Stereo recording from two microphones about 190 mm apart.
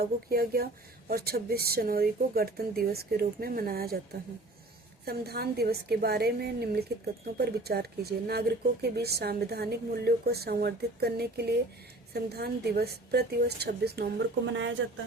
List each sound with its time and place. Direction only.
0.0 s speech: 55° right (ahead or behind)
5.0 s a woman's voice: 55° right (ahead or behind); by 14.7 s 75° right (ahead or behind)